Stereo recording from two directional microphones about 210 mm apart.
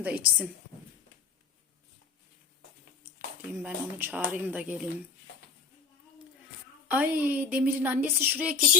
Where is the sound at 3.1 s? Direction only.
5° right (ahead or behind).